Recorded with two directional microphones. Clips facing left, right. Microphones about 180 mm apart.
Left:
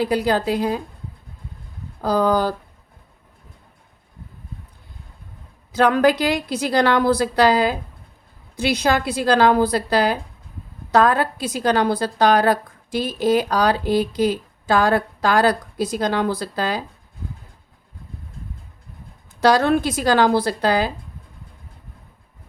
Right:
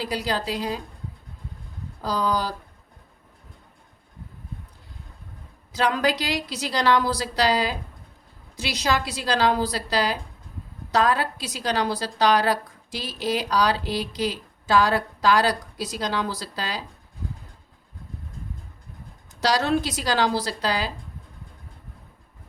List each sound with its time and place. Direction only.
0.0 s a woman's voice: 55° left (ahead or behind)
2.0 s speech: 55° left (ahead or behind)
5.7 s a woman's voice: 55° left (ahead or behind)
19.4 s a woman's voice: 55° left (ahead or behind)